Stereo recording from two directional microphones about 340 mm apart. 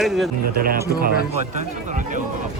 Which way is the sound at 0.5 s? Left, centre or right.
Right.